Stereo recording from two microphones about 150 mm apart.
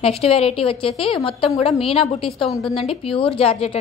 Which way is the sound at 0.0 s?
40° left (ahead or behind).